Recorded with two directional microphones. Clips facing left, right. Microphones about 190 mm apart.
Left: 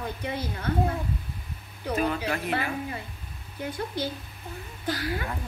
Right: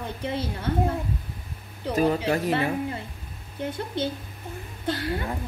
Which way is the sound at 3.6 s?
25° right (ahead or behind).